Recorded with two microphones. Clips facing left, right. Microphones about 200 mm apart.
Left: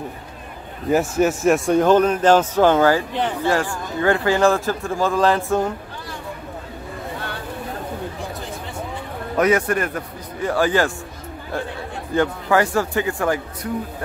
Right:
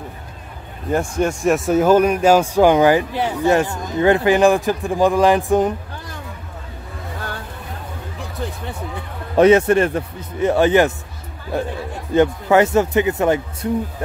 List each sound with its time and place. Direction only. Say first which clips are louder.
0.8 s a man's voice: left 2 dB; 5° left (ahead or behind); by 5.8 s 15° right (ahead or behind)
9.4 s speech: right 6 dB; 25° right (ahead or behind)